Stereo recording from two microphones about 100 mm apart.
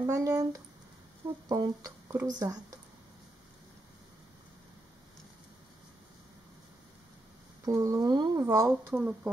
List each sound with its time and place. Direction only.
0.0 s speech: 30° right (ahead or behind)
7.6 s speech: 35° right (ahead or behind)
8.5 s speech: 30° right (ahead or behind)